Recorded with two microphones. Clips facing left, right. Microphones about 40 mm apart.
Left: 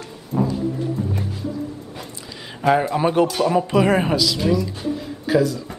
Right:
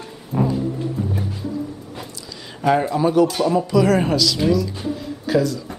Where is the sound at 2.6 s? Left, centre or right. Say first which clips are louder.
Even; centre.